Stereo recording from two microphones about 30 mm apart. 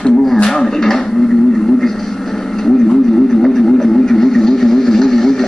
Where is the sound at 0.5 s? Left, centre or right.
Centre.